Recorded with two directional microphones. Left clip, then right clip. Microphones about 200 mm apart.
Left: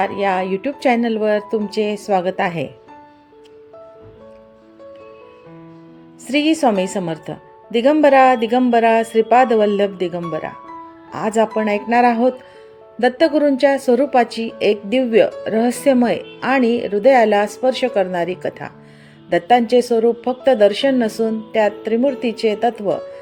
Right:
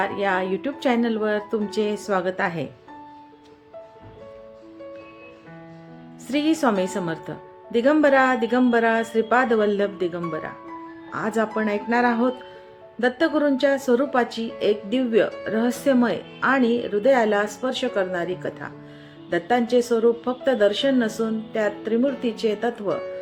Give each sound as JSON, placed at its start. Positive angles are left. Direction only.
{"t": 0.0, "sound": "speech", "side_deg": 25}
{"t": 6.2, "sound": "speech", "side_deg": 20}
{"t": 19.3, "sound": "speech", "side_deg": 30}